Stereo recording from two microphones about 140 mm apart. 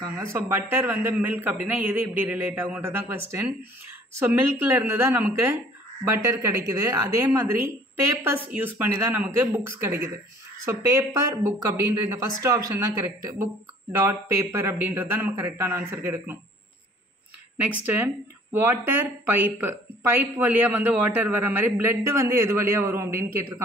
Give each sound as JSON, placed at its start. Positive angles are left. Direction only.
{"t": 0.0, "sound": "a woman's voice", "side_deg": -20}
{"t": 17.8, "sound": "a woman's voice", "side_deg": -15}